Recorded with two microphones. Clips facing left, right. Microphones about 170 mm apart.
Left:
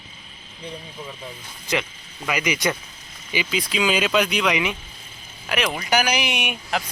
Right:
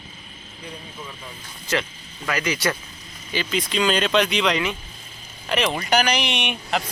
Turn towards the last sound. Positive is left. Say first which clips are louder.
# right 1 dB
turn(degrees=5)  # may be behind; listen again after turning